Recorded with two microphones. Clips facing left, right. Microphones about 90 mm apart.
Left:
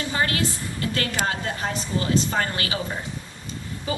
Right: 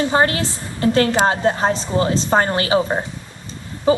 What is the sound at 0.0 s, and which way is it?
A woman's voice, 35° right (ahead or behind).